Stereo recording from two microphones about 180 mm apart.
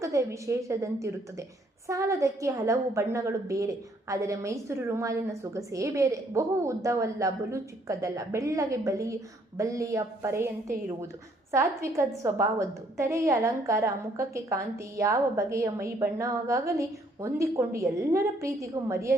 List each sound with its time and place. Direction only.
0.0 s a woman's voice: 15° right (ahead or behind)